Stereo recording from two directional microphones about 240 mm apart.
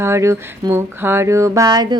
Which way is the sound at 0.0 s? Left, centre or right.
Centre.